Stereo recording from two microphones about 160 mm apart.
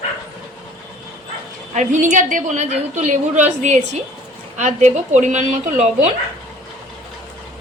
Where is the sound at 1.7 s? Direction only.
50° right (ahead or behind).